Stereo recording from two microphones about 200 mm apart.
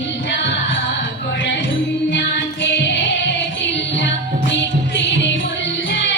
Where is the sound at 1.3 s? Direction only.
65° left (ahead or behind).